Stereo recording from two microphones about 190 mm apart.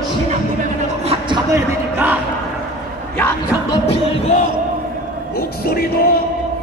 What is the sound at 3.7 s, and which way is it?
Music, 35° left (ahead or behind).